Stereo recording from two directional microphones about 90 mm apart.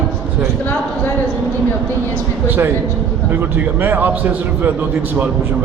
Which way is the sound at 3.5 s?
20° right (ahead or behind).